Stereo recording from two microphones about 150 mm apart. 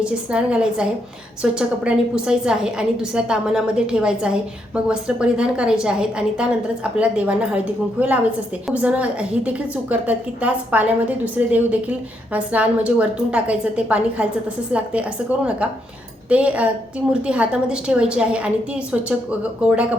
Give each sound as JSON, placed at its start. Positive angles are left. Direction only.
{"t": 0.0, "sound": "a woman's voice", "side_deg": -5}
{"t": 16.3, "sound": "a woman's voice", "side_deg": -10}